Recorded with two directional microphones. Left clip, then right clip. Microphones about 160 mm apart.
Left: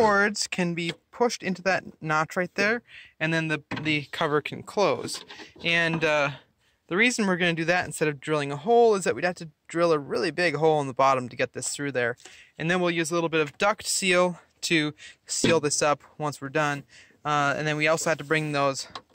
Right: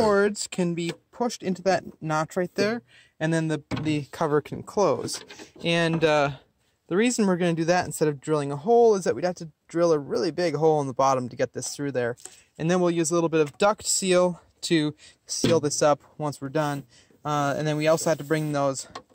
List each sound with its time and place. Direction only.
0.1 s speech: 10° right (ahead or behind)
3.2 s speech: 40° right (ahead or behind)
18.3 s speech: 25° right (ahead or behind)